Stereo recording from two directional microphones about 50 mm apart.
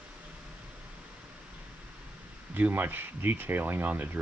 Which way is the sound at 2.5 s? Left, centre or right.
Right.